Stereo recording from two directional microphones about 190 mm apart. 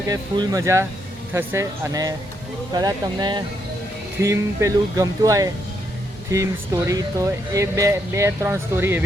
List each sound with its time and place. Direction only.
0.1 s speech: 20° right (ahead or behind)